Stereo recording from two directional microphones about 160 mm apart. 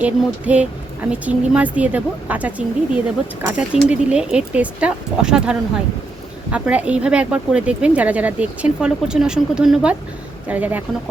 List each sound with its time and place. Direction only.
0.0 s a woman's voice: 10° right (ahead or behind)